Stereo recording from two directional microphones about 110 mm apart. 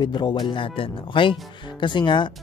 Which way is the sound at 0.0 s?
40° left (ahead or behind).